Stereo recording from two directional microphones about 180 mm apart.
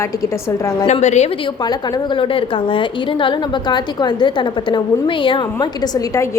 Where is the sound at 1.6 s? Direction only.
25° left (ahead or behind).